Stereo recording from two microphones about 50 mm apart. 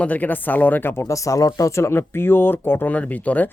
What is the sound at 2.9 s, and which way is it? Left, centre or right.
Speech, left.